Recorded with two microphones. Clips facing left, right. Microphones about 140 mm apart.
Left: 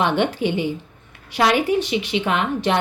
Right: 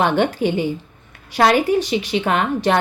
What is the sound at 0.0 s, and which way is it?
A woman's voice, 40° right (ahead or behind).